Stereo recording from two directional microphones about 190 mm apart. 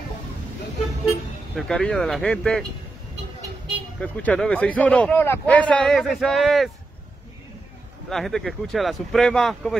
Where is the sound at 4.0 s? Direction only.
5° left (ahead or behind).